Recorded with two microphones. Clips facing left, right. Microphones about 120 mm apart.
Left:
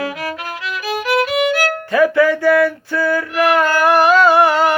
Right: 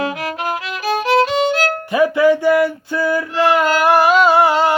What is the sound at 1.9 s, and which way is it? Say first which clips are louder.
Music: even; 20° right (ahead or behind).